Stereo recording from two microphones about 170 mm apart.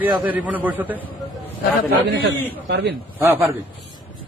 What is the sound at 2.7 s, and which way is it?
Speech, 90° right.